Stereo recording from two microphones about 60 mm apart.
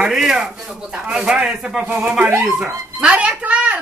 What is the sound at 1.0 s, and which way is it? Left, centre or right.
A child's voice, centre.